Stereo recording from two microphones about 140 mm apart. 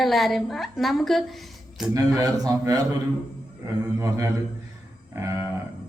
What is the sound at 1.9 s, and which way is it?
A man's voice, 25° right (ahead or behind).